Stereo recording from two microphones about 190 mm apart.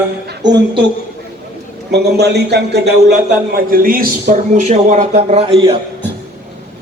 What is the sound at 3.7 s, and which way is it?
A man's voice, 50° right (ahead or behind).